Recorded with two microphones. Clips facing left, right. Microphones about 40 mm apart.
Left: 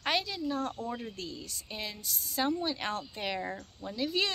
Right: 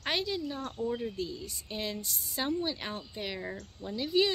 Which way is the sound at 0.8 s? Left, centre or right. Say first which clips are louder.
Right 4 dB; left.